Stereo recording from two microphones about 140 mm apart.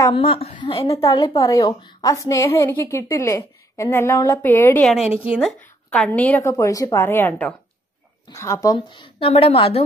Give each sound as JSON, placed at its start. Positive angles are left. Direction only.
{"t": 0.1, "sound": "speech", "side_deg": 40}
{"t": 1.1, "sound": "a woman's voice", "side_deg": 25}
{"t": 4.8, "sound": "a woman's voice", "side_deg": -5}
{"t": 5.9, "sound": "a woman's voice", "side_deg": 10}
{"t": 6.5, "sound": "a woman's voice", "side_deg": 25}
{"t": 8.3, "sound": "a woman's voice", "side_deg": 20}
{"t": 8.7, "sound": "speech", "side_deg": 35}